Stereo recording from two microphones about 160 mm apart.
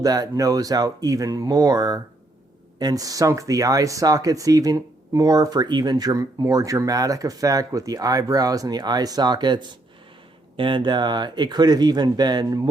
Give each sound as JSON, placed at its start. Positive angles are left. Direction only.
{"t": 0.0, "sound": "speech", "side_deg": -25}